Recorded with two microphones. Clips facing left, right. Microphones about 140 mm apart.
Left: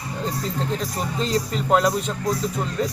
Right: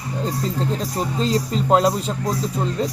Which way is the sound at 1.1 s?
35° right (ahead or behind).